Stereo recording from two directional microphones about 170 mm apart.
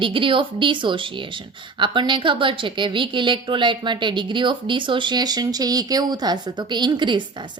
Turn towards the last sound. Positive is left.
turn(degrees=-25)  # may be behind; listen again after turning